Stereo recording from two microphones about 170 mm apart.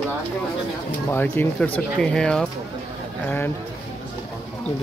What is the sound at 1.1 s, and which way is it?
A man's voice, 10° left (ahead or behind).